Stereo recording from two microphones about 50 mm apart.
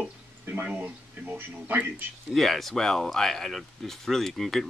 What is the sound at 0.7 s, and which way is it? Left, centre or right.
Speech, right.